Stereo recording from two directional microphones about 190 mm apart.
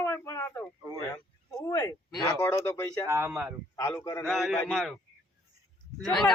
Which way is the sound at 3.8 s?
15° left (ahead or behind).